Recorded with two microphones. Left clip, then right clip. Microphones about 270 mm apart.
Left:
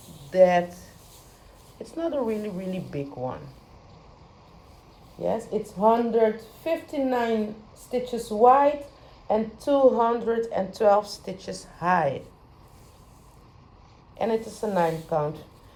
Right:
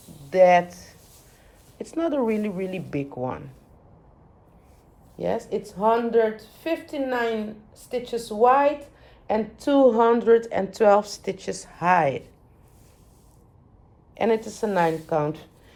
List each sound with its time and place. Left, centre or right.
0.3 s speech: centre
5.3 s speech: right
9.9 s speech: right
14.2 s speech: right